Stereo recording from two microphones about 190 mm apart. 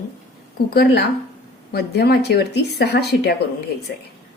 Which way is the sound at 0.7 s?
60° left (ahead or behind).